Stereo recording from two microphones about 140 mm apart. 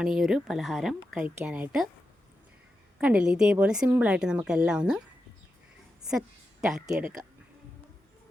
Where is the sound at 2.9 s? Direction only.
5° right (ahead or behind).